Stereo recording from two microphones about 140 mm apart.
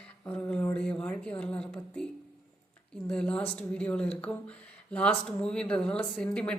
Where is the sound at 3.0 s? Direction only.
5° left (ahead or behind).